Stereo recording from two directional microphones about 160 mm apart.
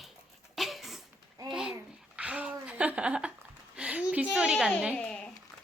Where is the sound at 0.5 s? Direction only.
Centre (ahead or behind).